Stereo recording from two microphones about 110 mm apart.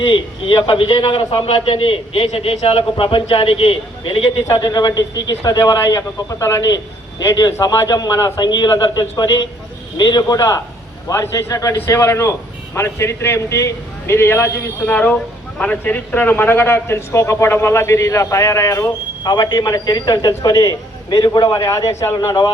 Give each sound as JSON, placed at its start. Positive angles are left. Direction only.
{"t": 0.0, "sound": "a man's voice", "side_deg": 55}
{"t": 4.6, "sound": "a man's voice", "side_deg": 40}
{"t": 14.9, "sound": "a man's voice", "side_deg": 15}
{"t": 19.2, "sound": "a man's voice", "side_deg": 40}
{"t": 21.6, "sound": "a man's voice", "side_deg": 30}